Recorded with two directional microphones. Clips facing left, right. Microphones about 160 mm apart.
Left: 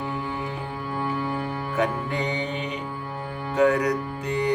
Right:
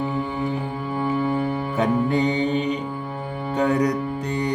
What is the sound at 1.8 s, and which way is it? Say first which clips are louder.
Music: right 6 dB; 35° right (ahead or behind).